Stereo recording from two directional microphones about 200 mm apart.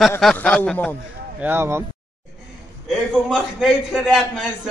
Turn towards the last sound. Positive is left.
turn(degrees=0)  # may be behind; listen again after turning